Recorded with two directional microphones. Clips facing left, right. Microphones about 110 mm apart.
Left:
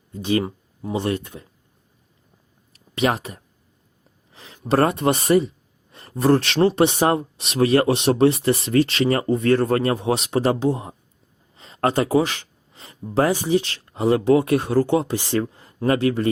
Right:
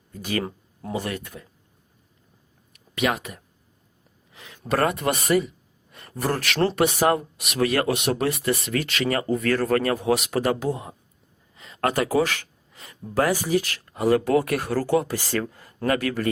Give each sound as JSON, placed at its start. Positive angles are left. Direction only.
{"t": 0.1, "sound": "speech", "side_deg": 25}
{"t": 0.4, "sound": "a sound", "side_deg": 10}
{"t": 0.9, "sound": "speech", "side_deg": 30}
{"t": 2.7, "sound": "speech", "side_deg": 30}